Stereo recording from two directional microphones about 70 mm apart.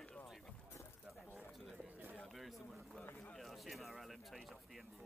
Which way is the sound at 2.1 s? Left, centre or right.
Centre.